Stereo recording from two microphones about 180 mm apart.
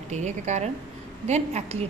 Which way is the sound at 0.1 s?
40° right (ahead or behind).